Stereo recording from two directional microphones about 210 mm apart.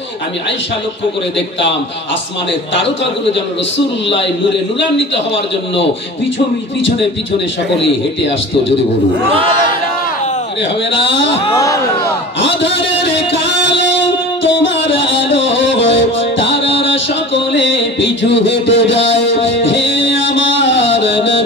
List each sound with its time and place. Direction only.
7.8 s a man's voice: 60° left (ahead or behind)
10.9 s a man's voice: 60° left (ahead or behind)
11.5 s speech: 15° left (ahead or behind)
12.4 s a sound: 60° left (ahead or behind)
14.4 s music: 60° left (ahead or behind)